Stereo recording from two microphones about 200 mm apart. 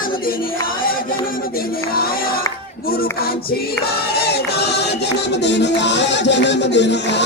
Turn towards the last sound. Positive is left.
turn(degrees=60)  # may be behind; listen again after turning